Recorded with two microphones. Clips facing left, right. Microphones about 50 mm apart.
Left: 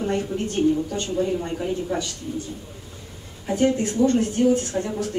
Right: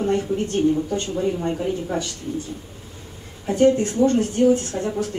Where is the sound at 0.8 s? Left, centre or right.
Right.